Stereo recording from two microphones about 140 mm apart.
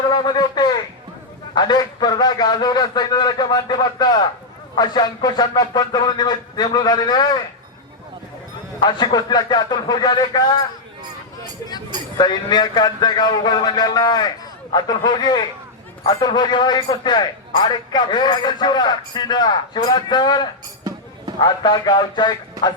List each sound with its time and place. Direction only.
0.1 s a man's voice: 30° left (ahead or behind)
8.8 s a man's voice: 30° left (ahead or behind)
12.1 s a man's voice: 30° left (ahead or behind)